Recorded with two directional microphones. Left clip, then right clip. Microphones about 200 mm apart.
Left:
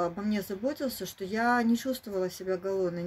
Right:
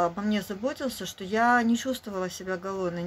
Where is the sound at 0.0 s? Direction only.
5° left (ahead or behind).